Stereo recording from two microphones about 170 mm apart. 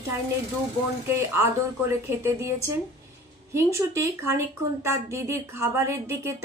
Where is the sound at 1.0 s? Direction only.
15° right (ahead or behind).